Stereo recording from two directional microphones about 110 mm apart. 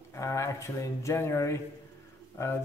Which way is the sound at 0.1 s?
25° left (ahead or behind).